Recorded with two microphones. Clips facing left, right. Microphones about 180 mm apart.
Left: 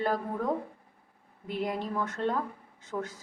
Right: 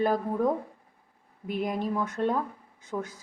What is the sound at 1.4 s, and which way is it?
Speech, 15° right (ahead or behind).